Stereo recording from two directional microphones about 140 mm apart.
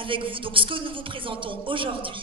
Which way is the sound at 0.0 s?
40° right (ahead or behind).